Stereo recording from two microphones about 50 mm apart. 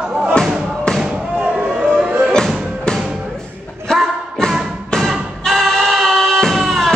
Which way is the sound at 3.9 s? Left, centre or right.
Centre.